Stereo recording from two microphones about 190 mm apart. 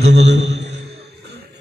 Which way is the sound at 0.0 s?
65° right (ahead or behind).